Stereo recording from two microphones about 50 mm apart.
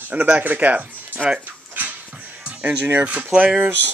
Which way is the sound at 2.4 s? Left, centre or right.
Right.